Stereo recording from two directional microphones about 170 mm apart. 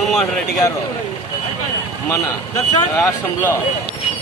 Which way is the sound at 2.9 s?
15° left (ahead or behind).